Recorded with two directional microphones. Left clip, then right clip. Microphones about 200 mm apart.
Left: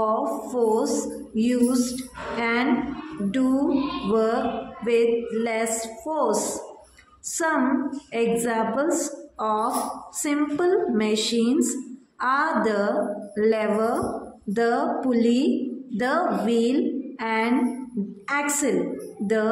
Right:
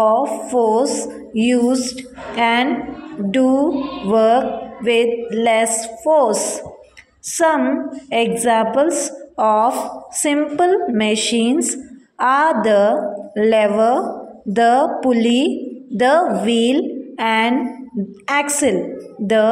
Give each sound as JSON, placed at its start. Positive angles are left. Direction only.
{"t": 0.0, "sound": "a woman's voice", "side_deg": -25}